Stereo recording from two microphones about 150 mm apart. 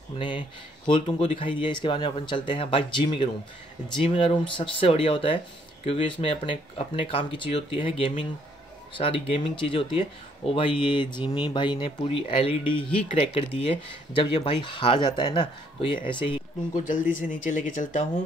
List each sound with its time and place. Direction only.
0.2 s speech: 30° left (ahead or behind)
16.7 s speech: 60° left (ahead or behind)